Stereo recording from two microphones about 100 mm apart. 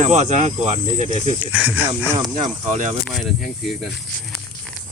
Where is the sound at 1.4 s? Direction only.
15° right (ahead or behind).